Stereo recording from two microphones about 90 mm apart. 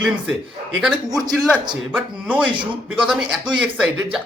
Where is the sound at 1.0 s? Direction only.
45° right (ahead or behind).